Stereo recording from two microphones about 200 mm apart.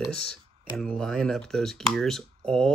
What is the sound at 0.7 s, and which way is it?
Speech, 5° left (ahead or behind).